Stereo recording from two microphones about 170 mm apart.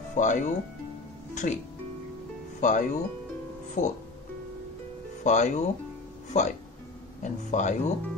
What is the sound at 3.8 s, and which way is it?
Speech, 45° left (ahead or behind).